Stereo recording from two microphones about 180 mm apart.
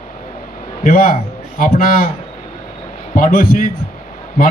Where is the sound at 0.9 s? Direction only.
50° left (ahead or behind).